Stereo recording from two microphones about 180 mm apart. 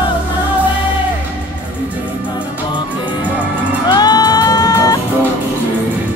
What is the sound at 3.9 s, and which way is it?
Music, 20° left (ahead or behind).